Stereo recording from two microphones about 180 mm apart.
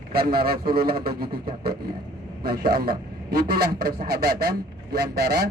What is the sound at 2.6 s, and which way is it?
Speech, 55° right (ahead or behind).